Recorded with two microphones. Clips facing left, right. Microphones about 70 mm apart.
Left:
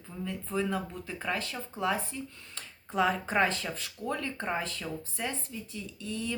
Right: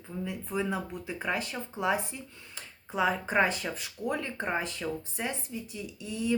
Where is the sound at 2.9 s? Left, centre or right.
Centre.